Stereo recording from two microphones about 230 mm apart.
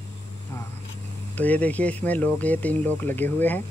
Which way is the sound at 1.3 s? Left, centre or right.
Centre.